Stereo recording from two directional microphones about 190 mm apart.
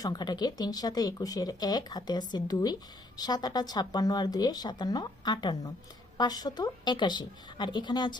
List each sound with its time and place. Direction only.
0.0 s speech: 20° left (ahead or behind)